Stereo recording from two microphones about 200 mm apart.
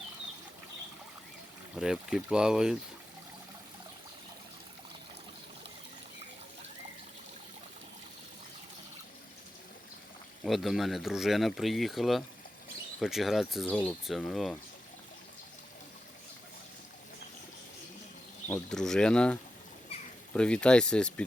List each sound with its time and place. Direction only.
1.7 s speech: 5° right (ahead or behind)
10.4 s speech: centre (ahead or behind)
18.4 s speech: 5° left (ahead or behind)
19.9 s a sound: 30° left (ahead or behind)
20.3 s speech: 5° left (ahead or behind)